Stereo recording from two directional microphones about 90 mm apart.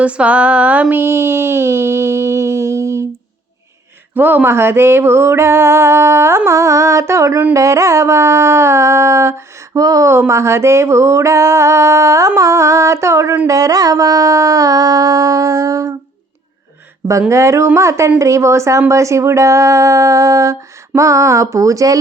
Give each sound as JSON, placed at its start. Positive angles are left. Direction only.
{"t": 0.0, "sound": "music", "side_deg": -15}
{"t": 4.1, "sound": "music", "side_deg": -20}
{"t": 7.5, "sound": "a woman's voice", "side_deg": -35}
{"t": 10.1, "sound": "a woman's voice", "side_deg": -30}
{"t": 17.1, "sound": "a woman's voice", "side_deg": -35}